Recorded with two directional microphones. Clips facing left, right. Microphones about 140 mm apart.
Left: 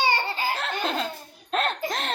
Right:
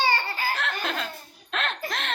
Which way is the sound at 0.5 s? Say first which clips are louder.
Left 2 dB; 30° left (ahead or behind).